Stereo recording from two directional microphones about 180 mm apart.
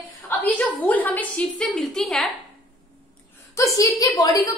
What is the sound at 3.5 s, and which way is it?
Speech, 20° left (ahead or behind).